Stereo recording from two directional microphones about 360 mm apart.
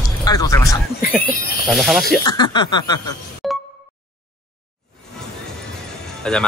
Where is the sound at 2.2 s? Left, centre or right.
Centre.